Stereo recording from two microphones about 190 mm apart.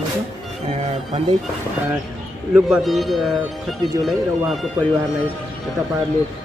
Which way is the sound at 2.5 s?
Centre (ahead or behind).